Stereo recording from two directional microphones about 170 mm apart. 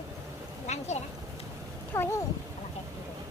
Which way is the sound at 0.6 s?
40° left (ahead or behind).